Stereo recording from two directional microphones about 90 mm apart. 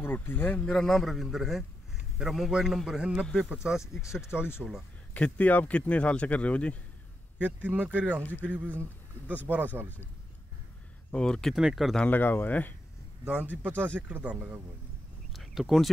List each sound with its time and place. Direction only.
0.0 s speech: 20° left (ahead or behind)
0.7 s a man's voice: 5° left (ahead or behind)
4.0 s speech: 30° left (ahead or behind)
4.6 s speech: 5° right (ahead or behind)
5.1 s speech: 15° left (ahead or behind)
7.3 s speech: 15° right (ahead or behind)
11.1 s speech: 10° left (ahead or behind)
11.5 s a man's voice: 5° right (ahead or behind)
12.0 s speech: 20° left (ahead or behind)
13.2 s speech: 10° right (ahead or behind)
13.6 s speech: 20° right (ahead or behind)
15.3 s a sound: 5° right (ahead or behind)